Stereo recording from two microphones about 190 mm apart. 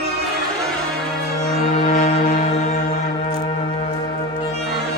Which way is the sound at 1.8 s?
40° left (ahead or behind).